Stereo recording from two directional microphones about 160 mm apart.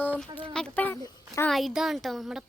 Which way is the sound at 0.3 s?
30° right (ahead or behind).